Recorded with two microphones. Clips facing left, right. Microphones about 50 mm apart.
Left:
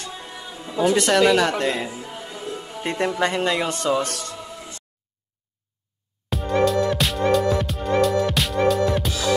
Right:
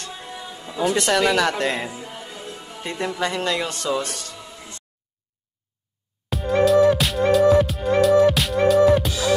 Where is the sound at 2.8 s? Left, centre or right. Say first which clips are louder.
Left 3 dB; left.